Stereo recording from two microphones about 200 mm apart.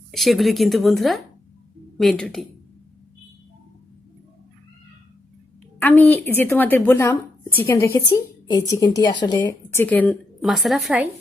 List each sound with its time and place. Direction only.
0.1 s a woman's voice: centre (ahead or behind)
6.0 s a woman's voice: 10° left (ahead or behind)